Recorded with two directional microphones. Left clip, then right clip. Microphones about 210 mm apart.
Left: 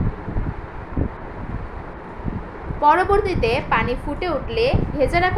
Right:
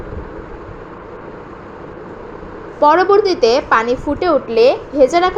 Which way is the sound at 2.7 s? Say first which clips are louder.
Right 5 dB; 15° right (ahead or behind).